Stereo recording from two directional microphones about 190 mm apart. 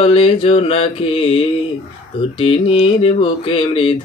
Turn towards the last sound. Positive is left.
turn(degrees=30)  # may be behind; listen again after turning